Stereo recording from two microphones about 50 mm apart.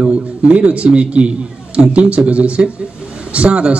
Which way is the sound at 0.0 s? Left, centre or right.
Right.